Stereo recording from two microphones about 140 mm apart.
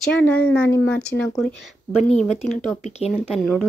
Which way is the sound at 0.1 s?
10° left (ahead or behind).